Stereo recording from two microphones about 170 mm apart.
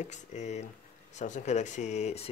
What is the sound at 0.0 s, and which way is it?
Speech, 45° left (ahead or behind).